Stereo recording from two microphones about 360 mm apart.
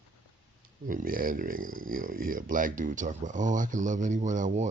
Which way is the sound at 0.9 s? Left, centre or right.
Right.